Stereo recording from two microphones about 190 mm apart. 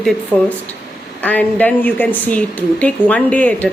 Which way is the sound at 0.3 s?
5° left (ahead or behind).